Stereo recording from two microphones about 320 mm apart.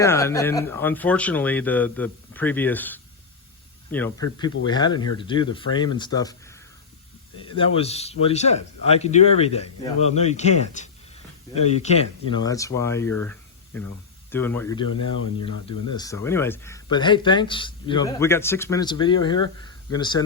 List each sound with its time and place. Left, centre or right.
0.0 s speech: centre
15.9 s speech: centre